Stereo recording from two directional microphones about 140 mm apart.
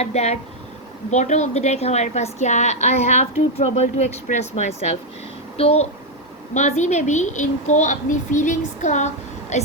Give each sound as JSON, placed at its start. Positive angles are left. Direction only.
{"t": 0.0, "sound": "a woman's voice", "side_deg": 50}